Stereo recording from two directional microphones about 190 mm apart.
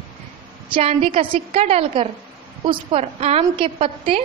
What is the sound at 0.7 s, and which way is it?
A woman's voice, 30° right (ahead or behind).